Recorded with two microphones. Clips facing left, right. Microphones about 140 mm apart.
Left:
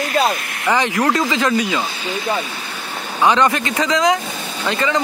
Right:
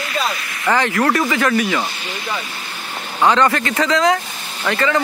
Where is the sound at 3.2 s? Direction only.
15° left (ahead or behind).